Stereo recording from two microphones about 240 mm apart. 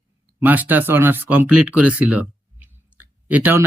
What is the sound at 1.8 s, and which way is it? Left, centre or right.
Clicking, centre.